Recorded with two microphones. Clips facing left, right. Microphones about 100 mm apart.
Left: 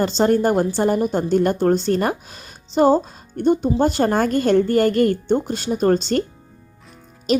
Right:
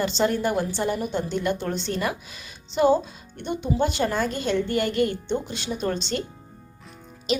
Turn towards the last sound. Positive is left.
turn(degrees=45)  # may be behind; listen again after turning